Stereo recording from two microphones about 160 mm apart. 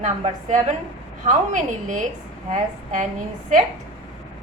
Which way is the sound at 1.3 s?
50° right (ahead or behind).